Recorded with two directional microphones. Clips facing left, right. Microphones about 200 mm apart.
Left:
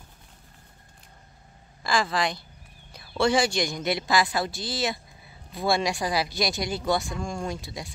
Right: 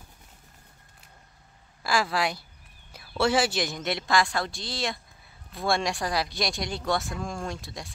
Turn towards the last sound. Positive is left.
turn(degrees=0)  # may be behind; listen again after turning